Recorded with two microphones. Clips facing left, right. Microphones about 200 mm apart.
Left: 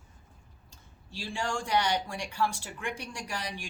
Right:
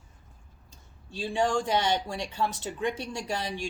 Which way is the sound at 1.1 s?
20° right (ahead or behind).